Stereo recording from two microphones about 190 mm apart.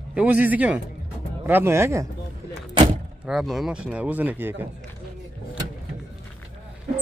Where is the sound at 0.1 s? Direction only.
5° right (ahead or behind).